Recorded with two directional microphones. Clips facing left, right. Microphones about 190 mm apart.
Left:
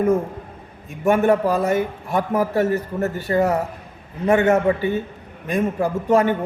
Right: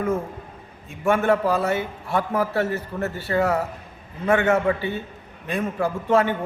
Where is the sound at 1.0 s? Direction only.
15° left (ahead or behind).